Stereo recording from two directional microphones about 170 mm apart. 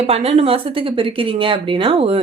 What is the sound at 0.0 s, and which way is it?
A woman's voice, 35° right (ahead or behind).